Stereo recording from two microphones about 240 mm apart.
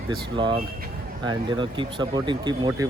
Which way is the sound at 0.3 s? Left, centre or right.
Centre.